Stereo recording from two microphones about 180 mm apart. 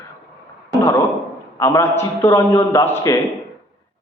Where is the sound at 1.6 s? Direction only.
15° left (ahead or behind).